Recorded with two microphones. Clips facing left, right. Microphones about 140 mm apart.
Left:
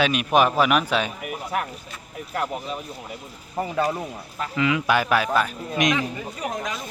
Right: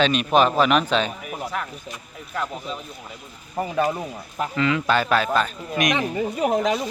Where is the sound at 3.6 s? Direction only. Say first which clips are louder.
Right 1 dB; 15° right (ahead or behind).